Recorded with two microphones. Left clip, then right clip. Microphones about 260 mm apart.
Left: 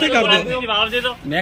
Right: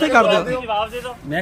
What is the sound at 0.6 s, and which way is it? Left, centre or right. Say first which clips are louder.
Speech: left 3 dB; right.